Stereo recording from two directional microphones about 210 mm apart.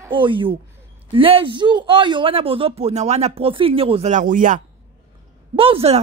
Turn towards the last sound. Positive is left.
turn(degrees=-30)  # may be behind; listen again after turning